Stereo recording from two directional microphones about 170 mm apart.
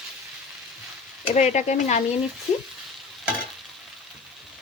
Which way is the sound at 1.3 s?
45° left (ahead or behind).